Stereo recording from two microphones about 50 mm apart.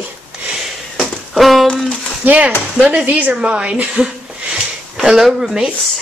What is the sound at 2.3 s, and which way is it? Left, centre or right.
A woman's voice, right.